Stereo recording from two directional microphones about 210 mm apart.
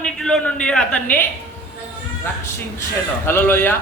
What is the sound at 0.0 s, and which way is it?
A man's voice, 5° left (ahead or behind).